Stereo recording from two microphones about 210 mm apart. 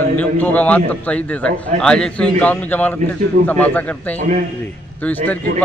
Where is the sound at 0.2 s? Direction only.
5° left (ahead or behind).